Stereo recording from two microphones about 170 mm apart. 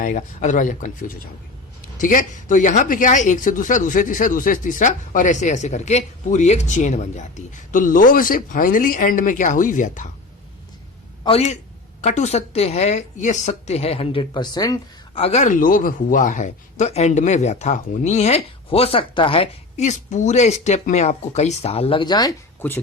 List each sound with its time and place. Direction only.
0.0 s speech: 45° left (ahead or behind)
11.3 s speech: 35° left (ahead or behind)
15.2 s speech: 40° left (ahead or behind); by 22.4 s 25° left (ahead or behind)